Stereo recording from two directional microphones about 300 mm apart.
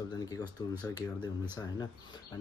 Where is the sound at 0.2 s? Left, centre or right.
Centre.